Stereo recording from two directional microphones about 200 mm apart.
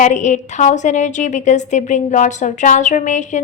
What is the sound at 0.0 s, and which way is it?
A woman's voice, 35° left (ahead or behind).